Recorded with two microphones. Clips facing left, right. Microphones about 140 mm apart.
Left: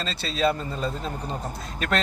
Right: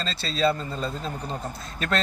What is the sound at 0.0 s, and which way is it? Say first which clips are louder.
Speech: even; 15° left (ahead or behind).